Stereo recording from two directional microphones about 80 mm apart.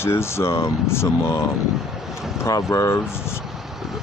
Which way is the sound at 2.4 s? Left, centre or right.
Left.